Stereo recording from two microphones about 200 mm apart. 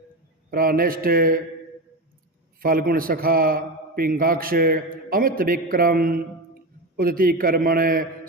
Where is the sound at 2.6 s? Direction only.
45° right (ahead or behind).